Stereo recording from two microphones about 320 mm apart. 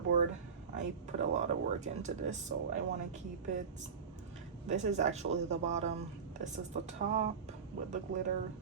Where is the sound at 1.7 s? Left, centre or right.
Right.